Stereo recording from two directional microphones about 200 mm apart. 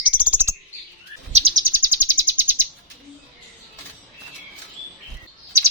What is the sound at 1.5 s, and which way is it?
Bird, 10° right (ahead or behind).